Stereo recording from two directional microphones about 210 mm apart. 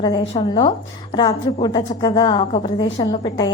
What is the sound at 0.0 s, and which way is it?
A woman's voice, 20° left (ahead or behind).